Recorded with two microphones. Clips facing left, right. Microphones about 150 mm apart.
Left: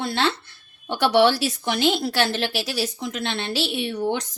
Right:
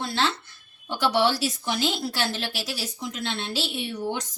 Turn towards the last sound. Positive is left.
turn(degrees=65)  # may be behind; listen again after turning